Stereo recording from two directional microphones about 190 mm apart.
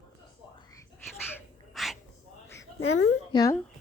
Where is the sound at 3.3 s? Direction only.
20° left (ahead or behind).